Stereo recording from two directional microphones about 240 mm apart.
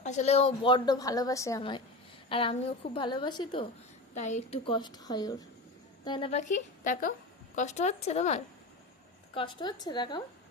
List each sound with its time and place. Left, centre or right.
0.0 s a woman's voice: left
4.1 s a woman's voice: left